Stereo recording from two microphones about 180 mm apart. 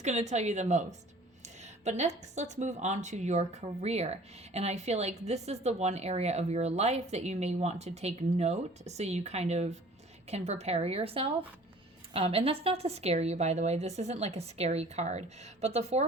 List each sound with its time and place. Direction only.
0.0 s speech: 40° right (ahead or behind)